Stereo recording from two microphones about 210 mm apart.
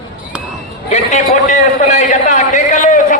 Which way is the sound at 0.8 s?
35° left (ahead or behind).